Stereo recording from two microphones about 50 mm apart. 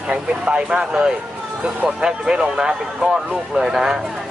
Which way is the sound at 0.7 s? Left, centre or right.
Centre.